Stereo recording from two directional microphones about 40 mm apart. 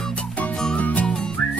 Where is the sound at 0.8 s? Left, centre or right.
Left.